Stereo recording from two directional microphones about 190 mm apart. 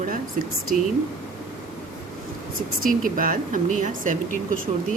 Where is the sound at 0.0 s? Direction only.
45° right (ahead or behind).